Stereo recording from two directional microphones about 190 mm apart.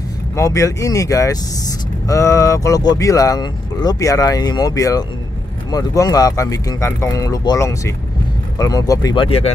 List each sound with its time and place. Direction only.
0.4 s speech: 15° left (ahead or behind)